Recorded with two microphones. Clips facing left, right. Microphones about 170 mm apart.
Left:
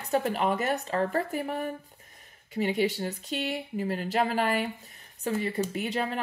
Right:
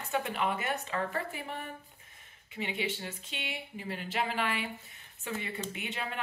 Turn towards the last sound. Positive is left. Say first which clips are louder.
# left 8 dB
turn(degrees=40)  # may be behind; listen again after turning